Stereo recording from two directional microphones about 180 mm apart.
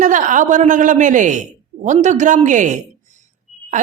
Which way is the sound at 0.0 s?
45° right (ahead or behind).